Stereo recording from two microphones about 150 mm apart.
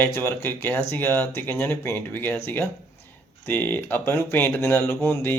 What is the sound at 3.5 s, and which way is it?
Speech, 15° left (ahead or behind).